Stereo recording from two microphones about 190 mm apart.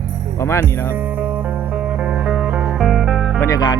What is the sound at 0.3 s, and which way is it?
Speech, 15° left (ahead or behind).